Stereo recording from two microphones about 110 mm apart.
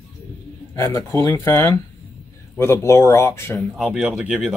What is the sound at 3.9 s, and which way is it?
Speech, 10° right (ahead or behind).